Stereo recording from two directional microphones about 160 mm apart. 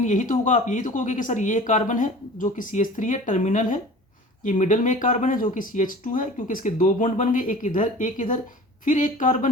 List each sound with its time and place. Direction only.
0.0 s speech: 50° left (ahead or behind)